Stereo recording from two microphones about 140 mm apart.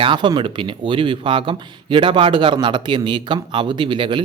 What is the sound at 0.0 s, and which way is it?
Speech, 35° right (ahead or behind).